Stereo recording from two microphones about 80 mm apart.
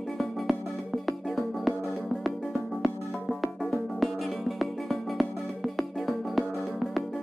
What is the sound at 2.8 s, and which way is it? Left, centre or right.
Music, centre.